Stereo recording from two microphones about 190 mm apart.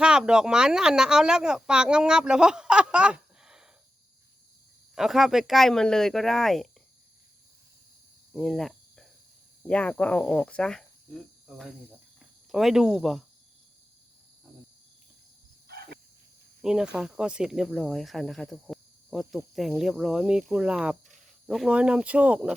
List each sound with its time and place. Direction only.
0.0 s speech: 5° right (ahead or behind)
4.9 s speech: centre (ahead or behind)
8.3 s cricket: centre (ahead or behind)
9.6 s speech: 5° left (ahead or behind)
15.6 s a sound: 55° right (ahead or behind)
16.6 s speech: 5° right (ahead or behind)